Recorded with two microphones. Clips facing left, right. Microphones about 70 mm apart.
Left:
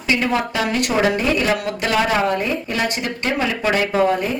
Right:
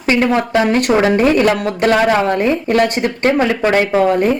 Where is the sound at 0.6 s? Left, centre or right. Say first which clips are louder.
Right 9 dB; right.